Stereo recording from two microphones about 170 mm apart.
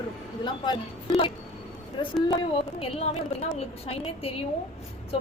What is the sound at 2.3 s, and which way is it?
A woman's voice, 35° left (ahead or behind).